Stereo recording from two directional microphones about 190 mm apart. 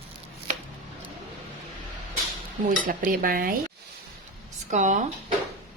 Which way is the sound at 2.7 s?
45° right (ahead or behind).